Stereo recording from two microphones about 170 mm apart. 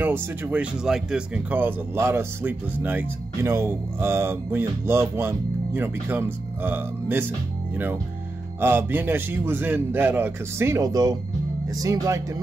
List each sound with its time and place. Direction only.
0.0 s speech: 10° right (ahead or behind)